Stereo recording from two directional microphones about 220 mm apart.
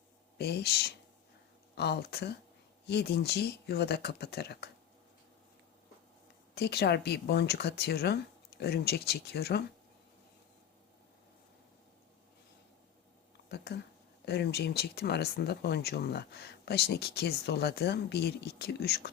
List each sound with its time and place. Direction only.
0.3 s speech: 45° left (ahead or behind)
6.5 s speech: 45° left (ahead or behind)
13.5 s speech: 50° left (ahead or behind)